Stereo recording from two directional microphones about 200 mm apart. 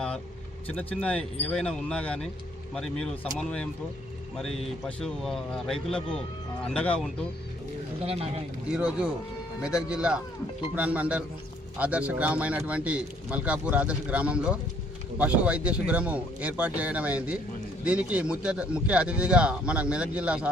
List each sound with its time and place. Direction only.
0.7 s speech: 5° left (ahead or behind)
8.0 s speech: 30° right (ahead or behind)
8.7 s speech: 5° right (ahead or behind)